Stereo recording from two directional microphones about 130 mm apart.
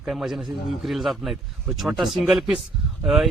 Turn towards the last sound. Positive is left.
turn(degrees=0)  # may be behind; listen again after turning